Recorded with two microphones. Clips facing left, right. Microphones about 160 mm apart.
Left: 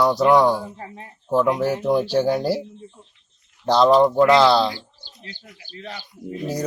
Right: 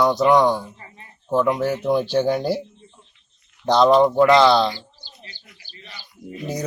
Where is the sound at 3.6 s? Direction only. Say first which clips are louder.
Even; 5° left (ahead or behind).